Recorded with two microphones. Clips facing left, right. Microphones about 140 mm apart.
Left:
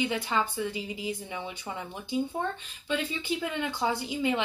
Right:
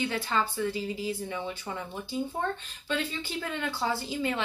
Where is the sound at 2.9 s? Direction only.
15° left (ahead or behind).